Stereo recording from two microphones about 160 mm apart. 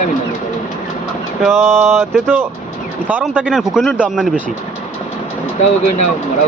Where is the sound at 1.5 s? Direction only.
10° right (ahead or behind).